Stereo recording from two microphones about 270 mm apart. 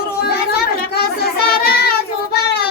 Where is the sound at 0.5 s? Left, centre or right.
Left.